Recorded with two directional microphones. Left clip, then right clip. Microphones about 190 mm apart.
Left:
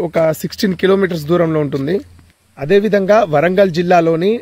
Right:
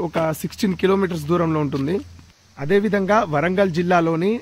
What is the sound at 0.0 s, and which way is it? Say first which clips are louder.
Speech: left 8 dB; 30° left (ahead or behind).